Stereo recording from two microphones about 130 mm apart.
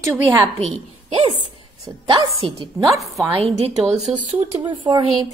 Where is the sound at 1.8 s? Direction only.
25° right (ahead or behind).